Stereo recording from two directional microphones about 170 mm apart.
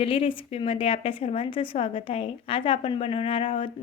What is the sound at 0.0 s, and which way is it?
A woman's voice, 35° left (ahead or behind).